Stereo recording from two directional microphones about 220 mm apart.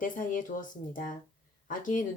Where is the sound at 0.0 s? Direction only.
40° left (ahead or behind).